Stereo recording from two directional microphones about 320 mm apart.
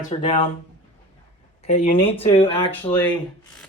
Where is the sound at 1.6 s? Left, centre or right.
Centre.